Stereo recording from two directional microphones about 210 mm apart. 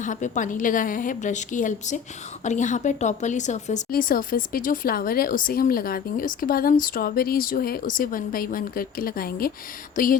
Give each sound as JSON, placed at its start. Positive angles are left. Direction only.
{"t": 0.0, "sound": "a woman's voice", "side_deg": 35}